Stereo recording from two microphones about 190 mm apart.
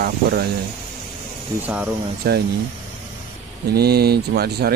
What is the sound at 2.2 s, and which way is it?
Speech, 55° right (ahead or behind).